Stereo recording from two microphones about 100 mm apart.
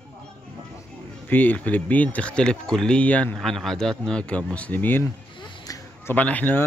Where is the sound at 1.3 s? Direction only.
15° left (ahead or behind).